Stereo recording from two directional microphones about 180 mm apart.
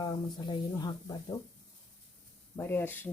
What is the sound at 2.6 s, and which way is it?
Speech, 10° left (ahead or behind).